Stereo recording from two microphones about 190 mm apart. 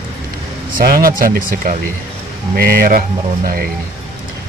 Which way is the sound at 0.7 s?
50° right (ahead or behind).